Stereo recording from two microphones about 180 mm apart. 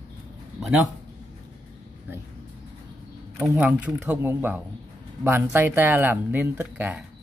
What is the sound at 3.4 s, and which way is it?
Speech, 5° right (ahead or behind).